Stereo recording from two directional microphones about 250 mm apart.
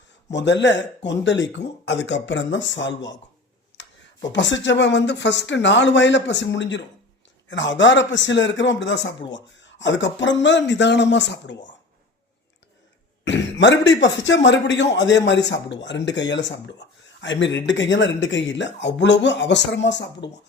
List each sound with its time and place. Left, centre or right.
0.3 s a man's voice: left
4.3 s a man's voice: left
13.2 s a man's voice: left